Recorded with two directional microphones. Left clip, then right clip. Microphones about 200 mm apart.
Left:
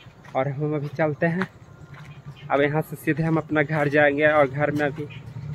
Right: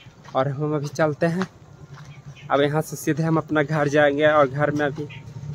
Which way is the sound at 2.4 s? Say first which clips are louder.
Right 1 dB; 20° right (ahead or behind).